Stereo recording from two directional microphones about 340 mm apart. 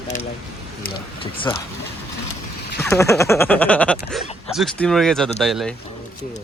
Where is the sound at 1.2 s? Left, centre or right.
Centre.